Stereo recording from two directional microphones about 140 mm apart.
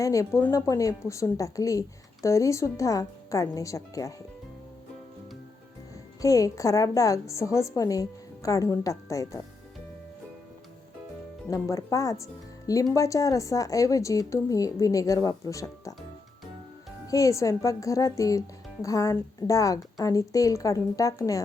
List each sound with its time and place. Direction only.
0.0 s speech: 25° left (ahead or behind)
6.2 s speech: 25° left (ahead or behind)
11.4 s speech: 20° left (ahead or behind)
17.1 s speech: 25° left (ahead or behind)